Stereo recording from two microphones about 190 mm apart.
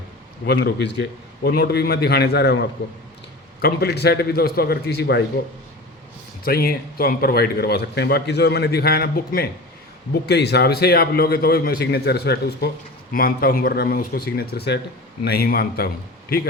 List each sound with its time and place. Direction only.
0.4 s a man's voice: 65° left (ahead or behind)
6.4 s a man's voice: 50° left (ahead or behind)